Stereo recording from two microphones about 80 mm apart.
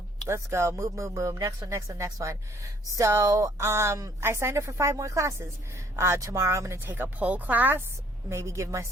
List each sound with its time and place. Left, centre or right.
0.3 s speech: right
8.3 s speech: right